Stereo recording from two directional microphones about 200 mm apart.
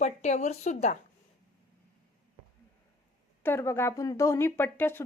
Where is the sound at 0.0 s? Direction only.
35° left (ahead or behind).